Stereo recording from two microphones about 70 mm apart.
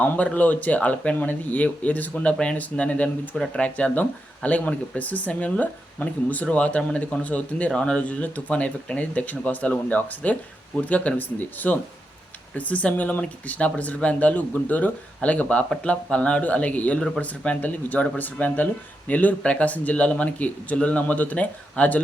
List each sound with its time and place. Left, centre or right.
0.0 s speech: left